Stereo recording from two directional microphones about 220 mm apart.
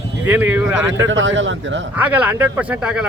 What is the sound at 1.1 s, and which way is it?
Speech, 60° right (ahead or behind).